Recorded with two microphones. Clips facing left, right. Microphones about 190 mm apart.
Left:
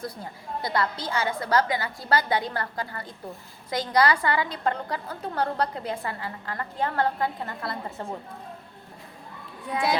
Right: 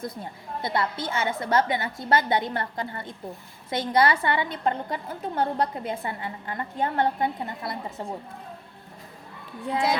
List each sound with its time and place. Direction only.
0.0 s a woman's voice: 25° right (ahead or behind)